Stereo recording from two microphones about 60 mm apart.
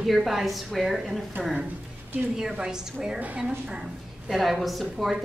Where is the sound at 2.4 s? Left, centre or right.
Centre.